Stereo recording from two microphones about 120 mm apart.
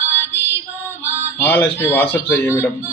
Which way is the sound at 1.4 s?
15° left (ahead or behind).